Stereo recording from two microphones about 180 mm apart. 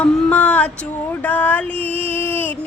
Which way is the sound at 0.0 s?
10° left (ahead or behind).